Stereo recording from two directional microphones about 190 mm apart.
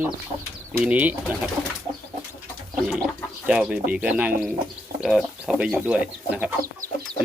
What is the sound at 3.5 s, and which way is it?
Speech, 5° right (ahead or behind).